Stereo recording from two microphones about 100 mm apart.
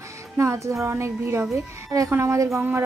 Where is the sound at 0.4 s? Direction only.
30° right (ahead or behind).